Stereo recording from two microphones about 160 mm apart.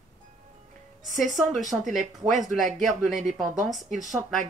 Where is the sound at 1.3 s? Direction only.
Centre (ahead or behind).